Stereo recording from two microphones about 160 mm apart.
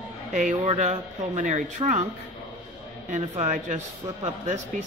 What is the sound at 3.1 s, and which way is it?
Speech, 50° right (ahead or behind).